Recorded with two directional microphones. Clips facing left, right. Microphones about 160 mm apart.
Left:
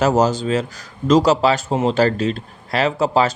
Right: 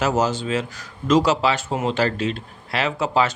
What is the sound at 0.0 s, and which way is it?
A man's voice, 40° left (ahead or behind).